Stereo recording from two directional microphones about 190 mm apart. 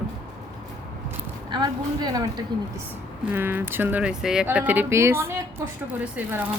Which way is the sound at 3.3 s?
10° right (ahead or behind).